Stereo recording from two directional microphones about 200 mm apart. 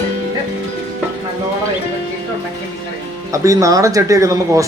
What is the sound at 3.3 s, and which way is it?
Speech, 15° right (ahead or behind).